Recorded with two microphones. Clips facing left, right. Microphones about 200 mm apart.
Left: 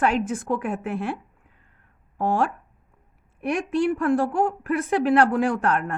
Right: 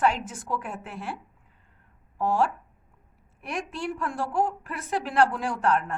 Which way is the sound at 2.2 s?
55° left (ahead or behind).